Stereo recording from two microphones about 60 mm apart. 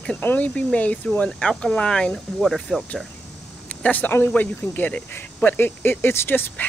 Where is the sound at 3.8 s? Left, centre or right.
Left.